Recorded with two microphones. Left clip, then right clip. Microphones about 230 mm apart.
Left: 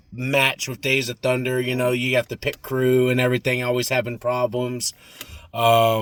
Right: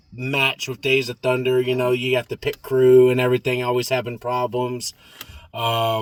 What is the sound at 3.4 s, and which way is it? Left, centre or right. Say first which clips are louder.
A man's voice: even; centre.